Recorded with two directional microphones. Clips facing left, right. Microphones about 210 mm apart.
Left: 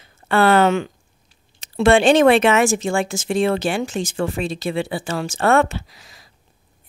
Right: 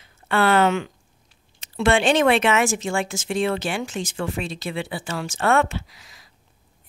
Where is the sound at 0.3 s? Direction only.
40° left (ahead or behind).